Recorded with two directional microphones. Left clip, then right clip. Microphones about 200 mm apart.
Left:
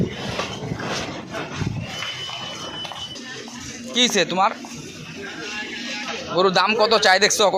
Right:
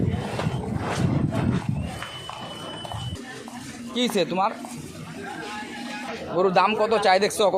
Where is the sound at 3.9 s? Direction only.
Centre (ahead or behind).